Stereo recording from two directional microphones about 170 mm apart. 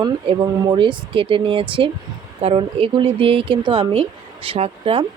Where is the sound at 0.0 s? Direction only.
25° right (ahead or behind).